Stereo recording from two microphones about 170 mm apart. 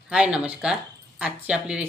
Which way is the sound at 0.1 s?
5° right (ahead or behind).